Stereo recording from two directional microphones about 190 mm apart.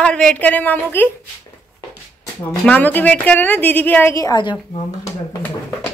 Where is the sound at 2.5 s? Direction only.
5° left (ahead or behind); by 5.1 s 25° left (ahead or behind).